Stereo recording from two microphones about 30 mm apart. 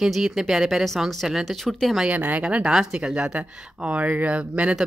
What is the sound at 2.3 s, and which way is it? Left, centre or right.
Speech, right.